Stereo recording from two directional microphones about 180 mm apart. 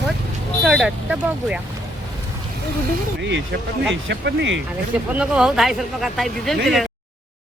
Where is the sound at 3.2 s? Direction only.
80° right.